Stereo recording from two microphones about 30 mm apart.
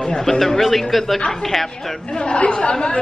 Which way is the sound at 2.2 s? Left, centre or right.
Left.